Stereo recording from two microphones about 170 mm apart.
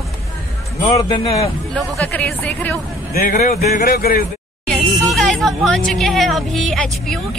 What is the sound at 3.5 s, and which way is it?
Speech, 40° left (ahead or behind).